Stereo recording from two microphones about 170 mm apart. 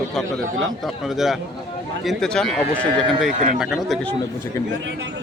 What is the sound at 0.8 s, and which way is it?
A man's voice, centre (ahead or behind).